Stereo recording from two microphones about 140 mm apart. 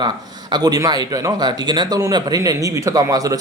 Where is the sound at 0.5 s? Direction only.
30° right (ahead or behind).